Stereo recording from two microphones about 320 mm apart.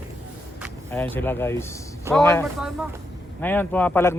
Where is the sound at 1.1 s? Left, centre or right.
Centre.